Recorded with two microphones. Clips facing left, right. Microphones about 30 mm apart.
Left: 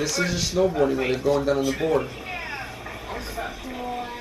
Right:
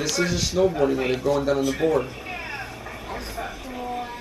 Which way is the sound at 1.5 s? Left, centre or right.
Centre.